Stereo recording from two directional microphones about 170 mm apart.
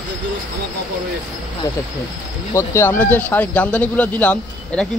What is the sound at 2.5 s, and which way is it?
Speech, 15° left (ahead or behind).